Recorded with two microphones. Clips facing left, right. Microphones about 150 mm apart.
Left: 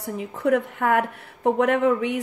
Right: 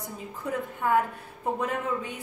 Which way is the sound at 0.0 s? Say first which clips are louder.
Left 10 dB; 75° left (ahead or behind).